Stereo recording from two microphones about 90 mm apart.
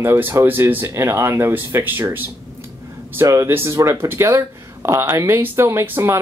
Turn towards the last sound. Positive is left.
turn(degrees=-25)  # may be behind; listen again after turning